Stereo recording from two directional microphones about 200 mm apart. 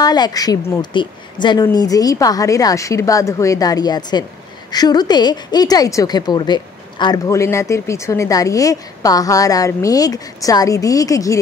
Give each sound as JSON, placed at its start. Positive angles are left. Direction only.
{"t": 0.0, "sound": "a woman's voice", "side_deg": 20}